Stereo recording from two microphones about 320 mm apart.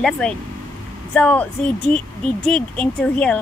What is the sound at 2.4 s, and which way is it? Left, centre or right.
Speech, centre.